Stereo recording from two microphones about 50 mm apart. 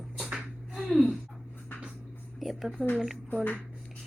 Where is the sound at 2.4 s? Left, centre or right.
Centre.